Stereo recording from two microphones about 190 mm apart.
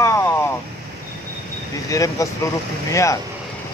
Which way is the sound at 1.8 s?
15° left (ahead or behind).